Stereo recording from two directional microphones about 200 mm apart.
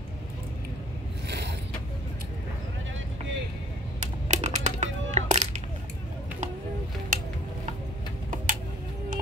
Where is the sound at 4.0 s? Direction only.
35° right (ahead or behind).